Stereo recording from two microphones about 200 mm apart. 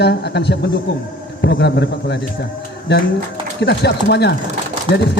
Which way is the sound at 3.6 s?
55° left (ahead or behind).